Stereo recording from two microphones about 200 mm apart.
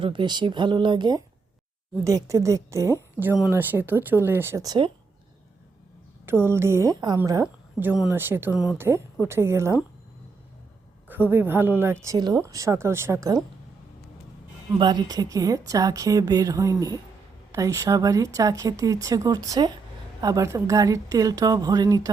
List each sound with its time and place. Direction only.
0.0 s speech: 25° right (ahead or behind)
6.2 s speech: 10° right (ahead or behind)
9.2 s speech: 15° right (ahead or behind)
11.1 s speech: 10° right (ahead or behind)
14.8 s speech: 20° right (ahead or behind)